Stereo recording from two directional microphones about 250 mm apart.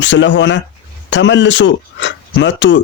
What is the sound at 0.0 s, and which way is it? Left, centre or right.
Speech, left.